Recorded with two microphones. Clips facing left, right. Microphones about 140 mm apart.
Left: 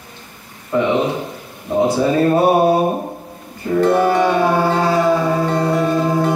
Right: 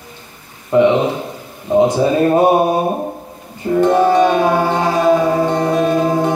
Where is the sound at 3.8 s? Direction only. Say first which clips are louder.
Right 2 dB; 20° right (ahead or behind).